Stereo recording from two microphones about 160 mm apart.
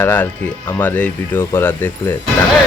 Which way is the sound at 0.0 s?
10° left (ahead or behind).